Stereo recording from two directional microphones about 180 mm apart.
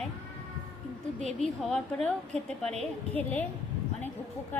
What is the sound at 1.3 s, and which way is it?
A woman's voice, centre (ahead or behind).